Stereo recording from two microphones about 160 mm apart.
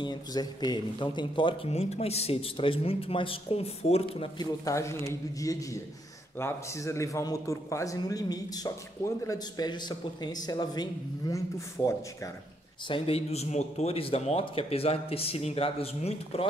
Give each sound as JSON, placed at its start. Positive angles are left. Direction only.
{"t": 0.0, "sound": "a man's voice", "side_deg": 25}
{"t": 4.4, "sound": "speech", "side_deg": 20}
{"t": 12.8, "sound": "a man's voice", "side_deg": 35}